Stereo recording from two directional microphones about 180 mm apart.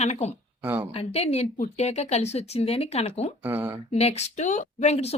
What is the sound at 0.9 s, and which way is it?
A woman's voice, 35° left (ahead or behind).